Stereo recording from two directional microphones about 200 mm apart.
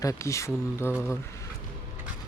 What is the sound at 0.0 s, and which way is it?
Speech, 15° left (ahead or behind).